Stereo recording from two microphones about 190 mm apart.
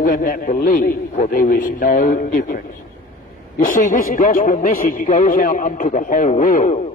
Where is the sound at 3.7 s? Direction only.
45° left (ahead or behind).